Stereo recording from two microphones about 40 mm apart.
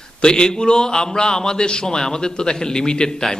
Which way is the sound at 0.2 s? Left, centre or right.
Centre.